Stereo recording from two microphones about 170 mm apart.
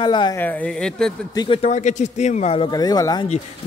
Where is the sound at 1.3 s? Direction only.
30° left (ahead or behind).